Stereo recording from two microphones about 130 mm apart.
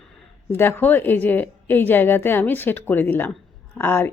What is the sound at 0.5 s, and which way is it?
Speech, 15° left (ahead or behind).